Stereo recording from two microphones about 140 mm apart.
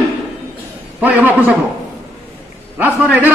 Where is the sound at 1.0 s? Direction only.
10° right (ahead or behind).